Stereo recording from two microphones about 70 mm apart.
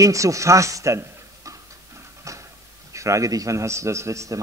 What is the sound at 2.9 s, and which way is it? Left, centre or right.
A man's voice, right.